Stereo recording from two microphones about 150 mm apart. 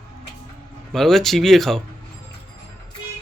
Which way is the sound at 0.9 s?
Centre (ahead or behind).